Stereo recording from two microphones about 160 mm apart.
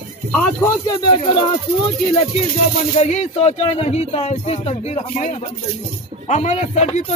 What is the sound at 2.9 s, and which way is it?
Speech, 45° left (ahead or behind).